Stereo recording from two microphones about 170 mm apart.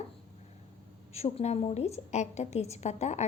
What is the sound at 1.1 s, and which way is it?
A woman's voice, 40° left (ahead or behind).